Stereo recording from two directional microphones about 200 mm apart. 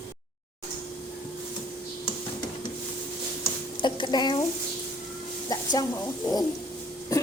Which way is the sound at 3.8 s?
20° left (ahead or behind).